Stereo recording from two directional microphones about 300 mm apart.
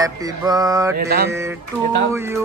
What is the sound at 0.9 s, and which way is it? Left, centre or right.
Mantra, right.